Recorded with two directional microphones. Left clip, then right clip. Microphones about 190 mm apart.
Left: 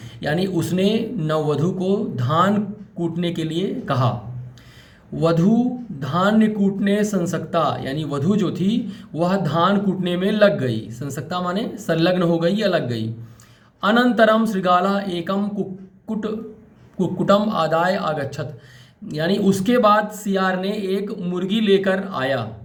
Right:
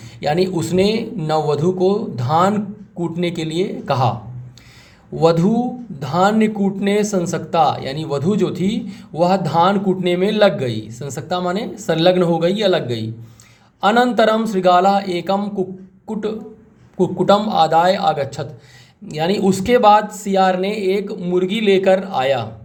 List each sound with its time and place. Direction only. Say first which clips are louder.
0.2 s speech: right 4 dB; 25° right (ahead or behind)
5.1 s speech: right 4 dB; 30° right (ahead or behind)
17.0 s speech: right 3 dB; 25° right (ahead or behind)